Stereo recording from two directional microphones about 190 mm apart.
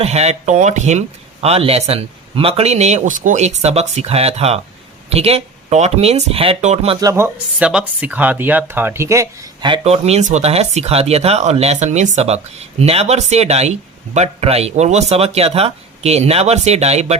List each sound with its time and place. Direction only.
0.0 s speech: 35° right (ahead or behind)
7.0 s speech: 15° right (ahead or behind); by 17.2 s 35° right (ahead or behind)